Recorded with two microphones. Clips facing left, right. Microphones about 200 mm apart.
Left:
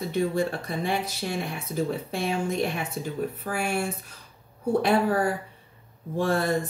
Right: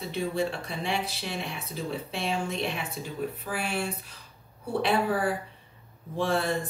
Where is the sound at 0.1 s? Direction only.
50° left (ahead or behind).